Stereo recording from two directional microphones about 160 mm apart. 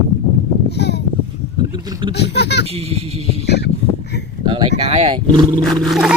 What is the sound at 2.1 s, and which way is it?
Speech, 90° left.